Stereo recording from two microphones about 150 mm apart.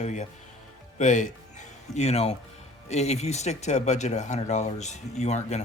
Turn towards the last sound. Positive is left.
turn(degrees=50)  # may be behind; listen again after turning